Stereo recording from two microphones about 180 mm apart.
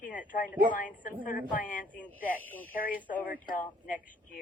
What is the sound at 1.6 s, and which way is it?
Speech, 50° left (ahead or behind).